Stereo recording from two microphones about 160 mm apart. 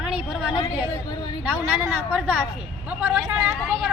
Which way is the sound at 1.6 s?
10° right (ahead or behind).